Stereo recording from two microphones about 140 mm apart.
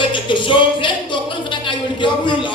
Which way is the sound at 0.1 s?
35° left (ahead or behind).